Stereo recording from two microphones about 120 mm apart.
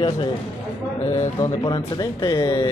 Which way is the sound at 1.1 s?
30° left (ahead or behind).